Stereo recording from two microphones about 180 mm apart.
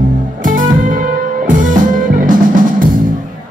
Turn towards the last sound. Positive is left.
turn(degrees=-45)  # may be behind; listen again after turning